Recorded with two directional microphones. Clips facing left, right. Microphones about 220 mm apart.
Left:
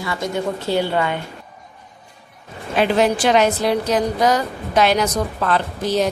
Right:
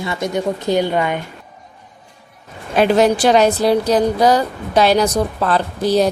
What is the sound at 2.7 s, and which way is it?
A woman's voice, 40° right (ahead or behind).